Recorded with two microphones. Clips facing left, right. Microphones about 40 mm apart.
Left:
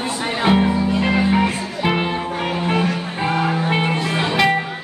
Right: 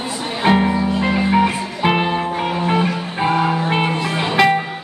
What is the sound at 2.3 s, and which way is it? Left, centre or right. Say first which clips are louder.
Music: even; centre.